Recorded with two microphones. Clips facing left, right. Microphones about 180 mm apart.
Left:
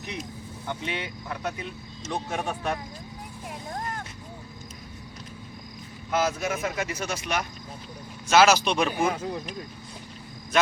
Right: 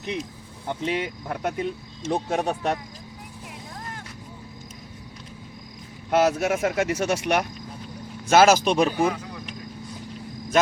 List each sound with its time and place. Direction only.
0.7 s speech: 40° right (ahead or behind)
2.0 s speech: 35° right (ahead or behind)
6.1 s speech: 70° right (ahead or behind)
8.3 s speech: 50° right (ahead or behind)
9.1 s speech: 30° left (ahead or behind)